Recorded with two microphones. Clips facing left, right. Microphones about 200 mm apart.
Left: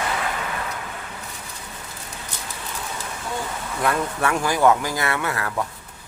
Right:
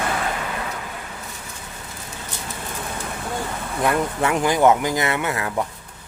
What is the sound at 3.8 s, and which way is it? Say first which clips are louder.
Speech: right 2 dB; 20° right (ahead or behind).